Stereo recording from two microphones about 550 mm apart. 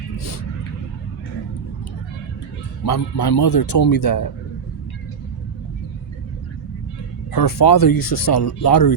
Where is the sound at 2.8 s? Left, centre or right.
Left.